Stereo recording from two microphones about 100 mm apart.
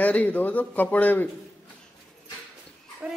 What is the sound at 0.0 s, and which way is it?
Speech, 15° left (ahead or behind).